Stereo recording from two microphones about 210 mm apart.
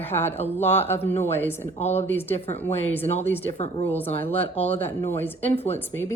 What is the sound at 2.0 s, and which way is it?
A woman's voice, 10° left (ahead or behind).